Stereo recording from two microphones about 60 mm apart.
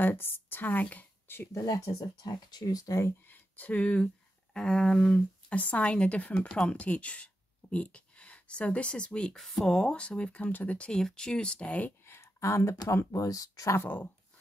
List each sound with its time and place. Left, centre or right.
0.0 s speech: left
1.5 s speech: left
3.3 s speech: left; by 5.2 s centre
5.5 s speech: left
10.9 s speech: centre
12.1 s speech: left